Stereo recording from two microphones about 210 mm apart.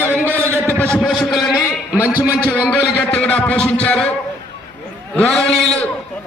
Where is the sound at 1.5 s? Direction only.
15° left (ahead or behind).